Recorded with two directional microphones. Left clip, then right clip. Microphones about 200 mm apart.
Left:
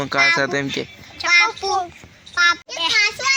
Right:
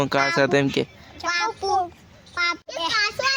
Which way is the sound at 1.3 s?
55° right (ahead or behind).